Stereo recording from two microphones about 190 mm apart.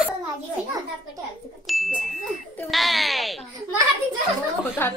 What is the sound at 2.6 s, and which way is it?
Music, centre (ahead or behind).